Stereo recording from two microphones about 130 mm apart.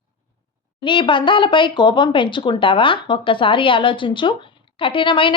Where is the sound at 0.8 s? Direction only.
40° left (ahead or behind).